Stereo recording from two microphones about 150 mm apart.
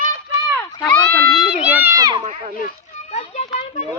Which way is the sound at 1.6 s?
10° right (ahead or behind).